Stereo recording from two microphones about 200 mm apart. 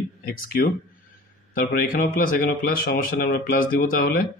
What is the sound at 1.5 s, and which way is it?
Speech, 45° left (ahead or behind).